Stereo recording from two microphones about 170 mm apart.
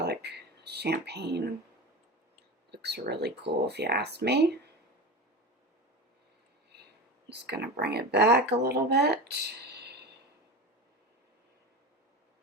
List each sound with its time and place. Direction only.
0.0 s speech: 75° right (ahead or behind)
2.7 s speech: 75° right (ahead or behind)
7.4 s speech: 75° right (ahead or behind)